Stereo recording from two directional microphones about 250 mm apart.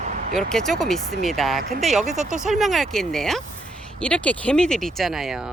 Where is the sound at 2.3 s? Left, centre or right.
Centre.